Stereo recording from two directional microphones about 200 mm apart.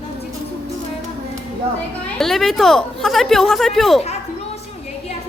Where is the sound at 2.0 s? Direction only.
Centre (ahead or behind).